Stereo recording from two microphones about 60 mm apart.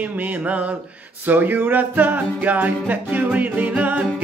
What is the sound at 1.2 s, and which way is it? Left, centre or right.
Music, right.